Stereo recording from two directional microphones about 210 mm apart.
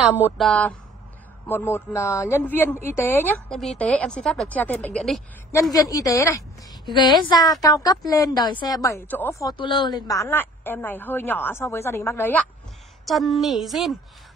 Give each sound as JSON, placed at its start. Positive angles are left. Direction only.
{"t": 0.1, "sound": "speech", "side_deg": -10}
{"t": 0.5, "sound": "a woman's voice", "side_deg": 5}
{"t": 5.5, "sound": "a woman's voice", "side_deg": 15}